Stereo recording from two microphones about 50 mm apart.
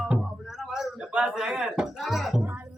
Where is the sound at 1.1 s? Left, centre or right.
Centre.